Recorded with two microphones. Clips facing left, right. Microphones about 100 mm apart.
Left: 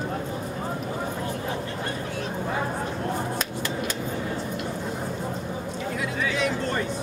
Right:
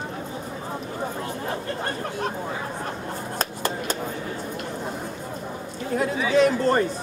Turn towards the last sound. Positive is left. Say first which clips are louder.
# right 7 dB
turn(degrees=-40)  # may be behind; listen again after turning